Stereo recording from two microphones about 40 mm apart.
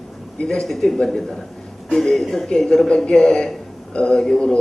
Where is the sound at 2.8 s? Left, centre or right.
Left.